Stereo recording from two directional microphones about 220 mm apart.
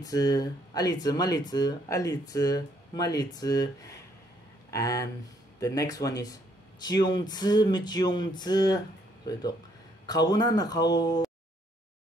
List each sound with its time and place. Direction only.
0.0 s speech: 15° left (ahead or behind)
10.0 s speech: 15° left (ahead or behind)